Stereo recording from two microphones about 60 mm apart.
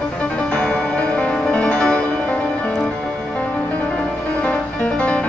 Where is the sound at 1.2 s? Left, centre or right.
Centre.